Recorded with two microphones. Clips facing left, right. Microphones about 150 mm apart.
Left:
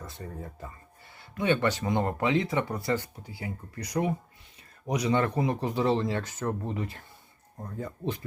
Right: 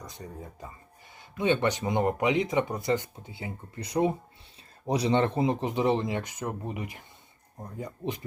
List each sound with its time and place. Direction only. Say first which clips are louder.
0.0 s speech: left 1 dB; 15° right (ahead or behind)